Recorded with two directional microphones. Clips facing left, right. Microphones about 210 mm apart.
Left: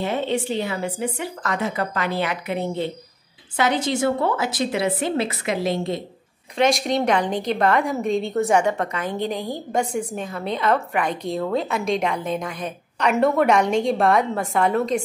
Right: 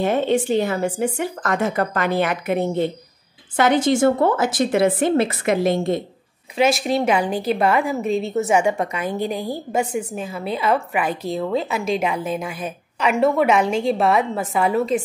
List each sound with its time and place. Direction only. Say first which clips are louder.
0.0 s speech: right 5 dB; 50° right (ahead or behind)
6.5 s a woman's voice: right 1 dB; 5° right (ahead or behind)